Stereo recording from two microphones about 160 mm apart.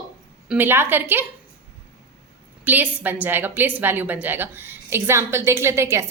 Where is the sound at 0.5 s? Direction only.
15° right (ahead or behind).